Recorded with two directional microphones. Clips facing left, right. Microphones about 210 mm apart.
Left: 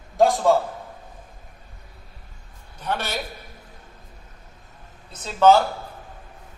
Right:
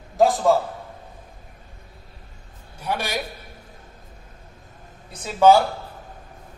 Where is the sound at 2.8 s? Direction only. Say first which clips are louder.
Right 1 dB; 10° right (ahead or behind).